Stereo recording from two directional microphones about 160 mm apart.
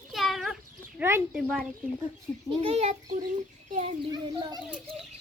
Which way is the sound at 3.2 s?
55° right (ahead or behind).